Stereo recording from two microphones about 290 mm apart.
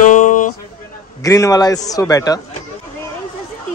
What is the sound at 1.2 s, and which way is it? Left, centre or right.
Speech, centre.